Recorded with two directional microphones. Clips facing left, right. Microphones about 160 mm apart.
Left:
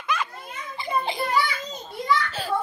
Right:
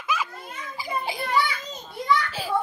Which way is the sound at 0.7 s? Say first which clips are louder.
Left 3 dB; 5° right (ahead or behind).